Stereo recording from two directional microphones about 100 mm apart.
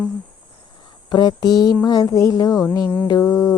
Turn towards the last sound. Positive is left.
turn(degrees=35)  # may be behind; listen again after turning